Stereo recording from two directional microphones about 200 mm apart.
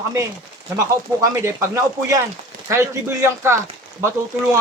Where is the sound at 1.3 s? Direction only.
15° right (ahead or behind).